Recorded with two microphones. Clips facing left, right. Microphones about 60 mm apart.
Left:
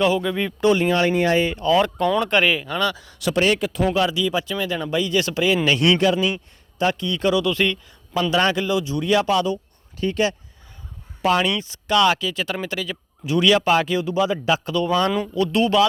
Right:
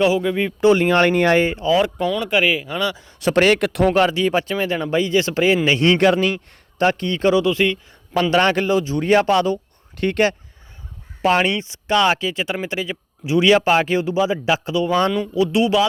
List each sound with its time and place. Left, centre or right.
0.0 s speech: centre
0.7 s speech: right
0.9 s speech: right
1.6 s speech: centre
2.0 s speech: centre
2.3 s speech: centre
3.0 s speech: right
3.3 s speech: right
3.8 s speech: right
6.0 s speech: right
7.5 s speech: centre
8.1 s speech: right
11.2 s speech: right
14.1 s speech: centre